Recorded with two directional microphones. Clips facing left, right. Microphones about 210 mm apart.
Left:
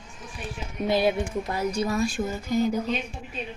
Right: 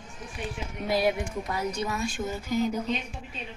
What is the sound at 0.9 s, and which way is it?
Speech, 25° left (ahead or behind).